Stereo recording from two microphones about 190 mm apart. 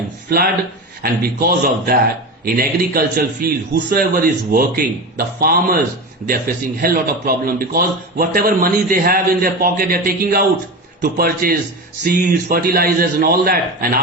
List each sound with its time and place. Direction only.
0.3 s speech: 50° right (ahead or behind)
6.8 s speech: 50° right (ahead or behind)